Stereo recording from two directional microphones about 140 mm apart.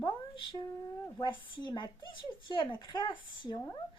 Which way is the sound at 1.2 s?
35° left (ahead or behind).